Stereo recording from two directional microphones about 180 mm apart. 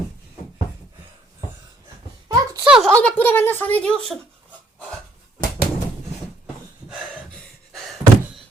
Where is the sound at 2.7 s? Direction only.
Centre (ahead or behind).